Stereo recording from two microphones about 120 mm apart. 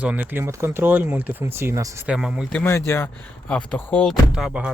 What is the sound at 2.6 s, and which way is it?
Speech, 20° left (ahead or behind).